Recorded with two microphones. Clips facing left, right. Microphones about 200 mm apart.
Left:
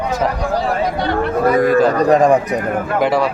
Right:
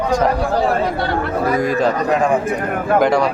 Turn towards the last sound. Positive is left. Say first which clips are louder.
# even
turn(degrees=5)  # may be behind; listen again after turning